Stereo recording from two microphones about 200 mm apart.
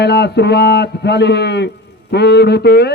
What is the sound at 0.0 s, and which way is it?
A man's voice, 55° left (ahead or behind).